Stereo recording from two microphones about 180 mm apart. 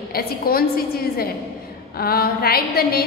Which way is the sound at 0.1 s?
55° left (ahead or behind).